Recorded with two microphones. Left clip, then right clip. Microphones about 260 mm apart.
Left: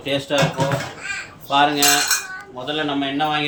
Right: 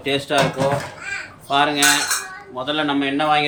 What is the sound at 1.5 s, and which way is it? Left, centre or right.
A man's voice, centre.